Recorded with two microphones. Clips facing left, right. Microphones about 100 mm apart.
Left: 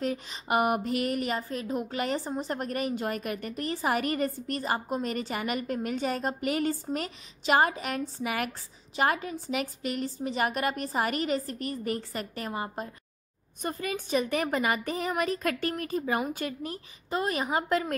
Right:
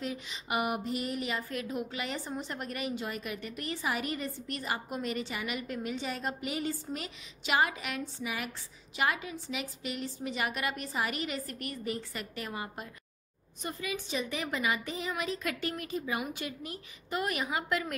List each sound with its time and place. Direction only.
0.0 s a woman's voice: 45° left (ahead or behind)
1.5 s a woman's voice: 35° left (ahead or behind)
11.8 s a woman's voice: 45° left (ahead or behind)
13.6 s a woman's voice: 45° left (ahead or behind)